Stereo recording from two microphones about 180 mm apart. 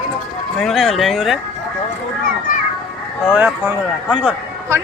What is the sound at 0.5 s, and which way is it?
Speech, centre (ahead or behind).